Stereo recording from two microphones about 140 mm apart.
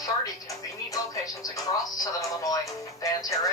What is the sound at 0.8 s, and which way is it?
Speech, 25° left (ahead or behind).